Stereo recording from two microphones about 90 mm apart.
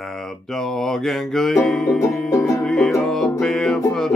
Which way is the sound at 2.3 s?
35° left (ahead or behind).